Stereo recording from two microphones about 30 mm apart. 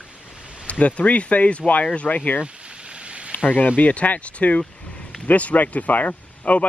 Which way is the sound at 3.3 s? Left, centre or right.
Left.